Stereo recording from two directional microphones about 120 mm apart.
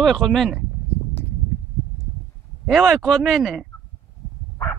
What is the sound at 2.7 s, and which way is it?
Speech, centre (ahead or behind).